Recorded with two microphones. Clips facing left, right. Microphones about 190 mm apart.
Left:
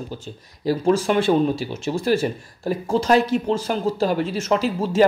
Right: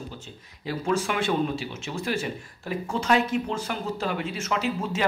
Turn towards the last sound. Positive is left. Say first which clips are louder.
# left 7 dB
turn(degrees=35)  # may be behind; listen again after turning